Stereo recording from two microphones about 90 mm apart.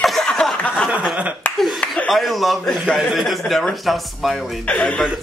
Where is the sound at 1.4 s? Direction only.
20° left (ahead or behind).